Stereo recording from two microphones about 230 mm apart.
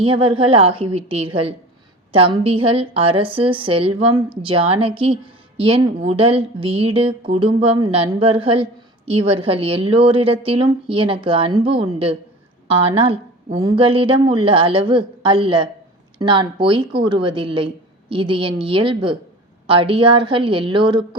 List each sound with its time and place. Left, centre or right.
0.0 s speech: right